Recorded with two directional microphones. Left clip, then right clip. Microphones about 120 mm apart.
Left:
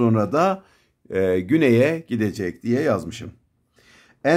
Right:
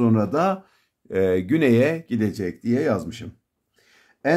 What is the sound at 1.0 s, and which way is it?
Speech, 25° left (ahead or behind).